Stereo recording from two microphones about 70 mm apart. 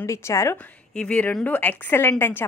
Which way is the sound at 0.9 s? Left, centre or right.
Left.